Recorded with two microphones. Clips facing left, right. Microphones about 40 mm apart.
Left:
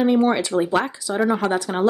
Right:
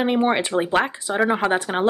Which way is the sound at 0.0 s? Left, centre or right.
Right.